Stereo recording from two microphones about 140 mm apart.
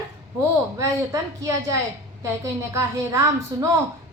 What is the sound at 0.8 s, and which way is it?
A woman's voice, 25° right (ahead or behind).